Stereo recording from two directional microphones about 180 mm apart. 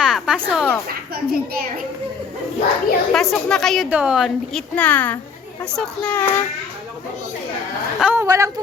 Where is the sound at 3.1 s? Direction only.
Centre (ahead or behind).